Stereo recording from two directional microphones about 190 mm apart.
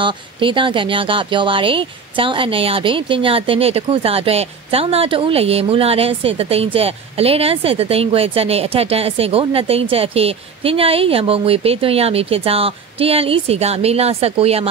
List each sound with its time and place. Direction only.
0.0 s speech: 25° right (ahead or behind)